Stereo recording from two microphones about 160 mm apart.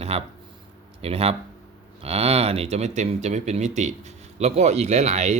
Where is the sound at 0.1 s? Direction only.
40° right (ahead or behind).